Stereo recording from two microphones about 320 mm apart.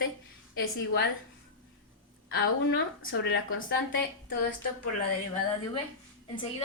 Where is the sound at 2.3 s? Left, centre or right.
Left.